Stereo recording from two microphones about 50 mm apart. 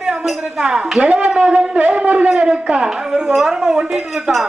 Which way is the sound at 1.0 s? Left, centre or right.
Right.